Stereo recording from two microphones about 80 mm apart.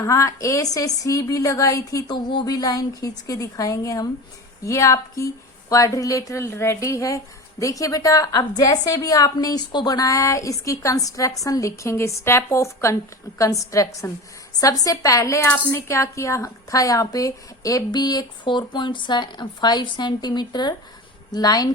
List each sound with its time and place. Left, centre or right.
0.0 s a woman's voice: left
2.0 s a woman's voice: left